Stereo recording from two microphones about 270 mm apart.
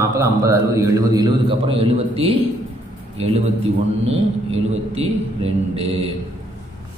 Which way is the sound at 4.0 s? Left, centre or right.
Right.